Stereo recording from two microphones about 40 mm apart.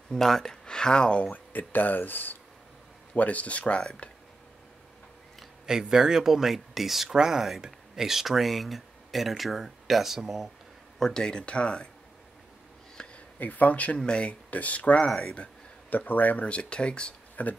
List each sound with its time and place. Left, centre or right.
0.1 s speech: centre
1.3 s speech: left
3.2 s speech: left
5.7 s speech: centre
11.0 s speech: centre
13.0 s a sound: centre
13.4 s speech: left
13.9 s speech: left
14.5 s speech: left
15.0 s speech: centre
16.1 s speech: left
16.4 s speech: left
17.4 s speech: left